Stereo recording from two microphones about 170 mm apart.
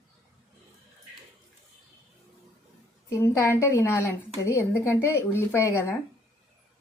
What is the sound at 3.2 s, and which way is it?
A woman's voice, 15° left (ahead or behind).